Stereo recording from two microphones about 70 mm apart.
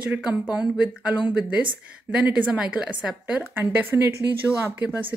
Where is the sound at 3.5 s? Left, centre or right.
Right.